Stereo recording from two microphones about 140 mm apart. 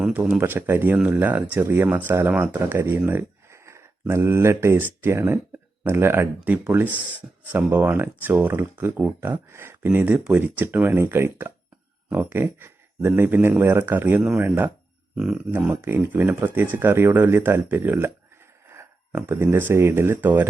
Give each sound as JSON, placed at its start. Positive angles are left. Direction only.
{"t": 0.0, "sound": "speech", "side_deg": -5}